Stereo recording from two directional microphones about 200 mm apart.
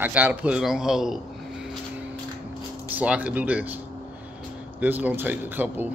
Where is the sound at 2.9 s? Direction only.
5° right (ahead or behind).